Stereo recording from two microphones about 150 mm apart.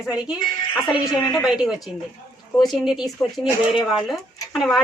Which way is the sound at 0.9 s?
25° left (ahead or behind).